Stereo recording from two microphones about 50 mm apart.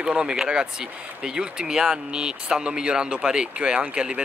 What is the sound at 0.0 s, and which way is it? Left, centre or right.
Speech, centre.